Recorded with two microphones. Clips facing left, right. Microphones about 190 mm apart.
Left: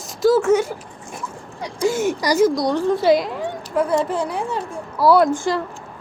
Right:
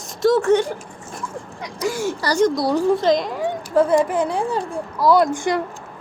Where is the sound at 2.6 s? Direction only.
5° right (ahead or behind).